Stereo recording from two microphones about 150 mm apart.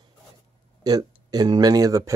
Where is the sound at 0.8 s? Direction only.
25° right (ahead or behind).